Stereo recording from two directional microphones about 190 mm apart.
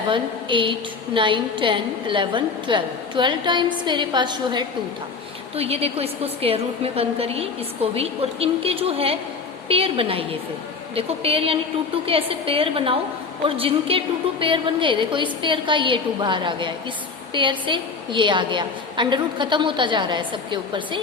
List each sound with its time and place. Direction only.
0.1 s a woman's voice: 25° right (ahead or behind)